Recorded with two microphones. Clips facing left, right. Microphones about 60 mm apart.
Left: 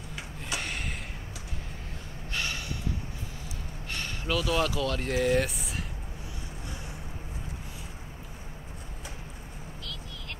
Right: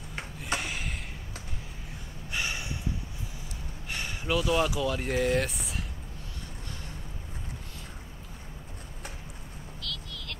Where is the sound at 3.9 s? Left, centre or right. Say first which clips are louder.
Right 1 dB; centre.